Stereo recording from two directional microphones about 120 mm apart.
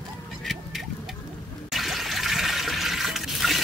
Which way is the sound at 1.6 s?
Centre (ahead or behind).